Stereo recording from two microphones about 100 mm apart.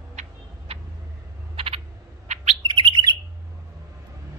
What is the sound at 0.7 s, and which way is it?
Vehicle, 70° right (ahead or behind).